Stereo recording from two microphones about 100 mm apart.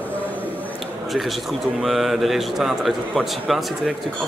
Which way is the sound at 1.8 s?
Centre (ahead or behind).